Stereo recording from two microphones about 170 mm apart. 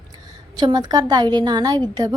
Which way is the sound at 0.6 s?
25° right (ahead or behind).